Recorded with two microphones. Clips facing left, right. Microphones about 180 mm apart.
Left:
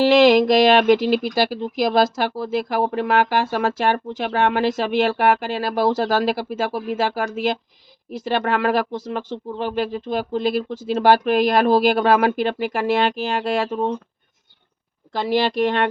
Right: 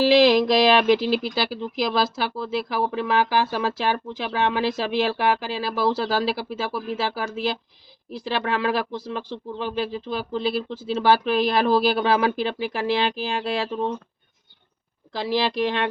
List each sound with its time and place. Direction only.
0.0 s speech: 50° left (ahead or behind)
15.1 s speech: 50° left (ahead or behind)